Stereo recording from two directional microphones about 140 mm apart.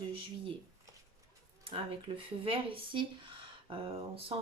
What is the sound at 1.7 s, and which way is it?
Speech, 40° right (ahead or behind).